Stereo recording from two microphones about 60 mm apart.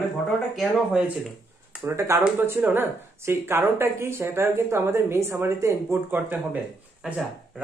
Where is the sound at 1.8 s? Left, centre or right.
Right.